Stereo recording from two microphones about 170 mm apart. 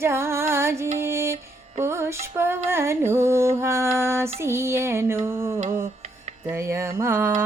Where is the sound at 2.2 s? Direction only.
15° right (ahead or behind).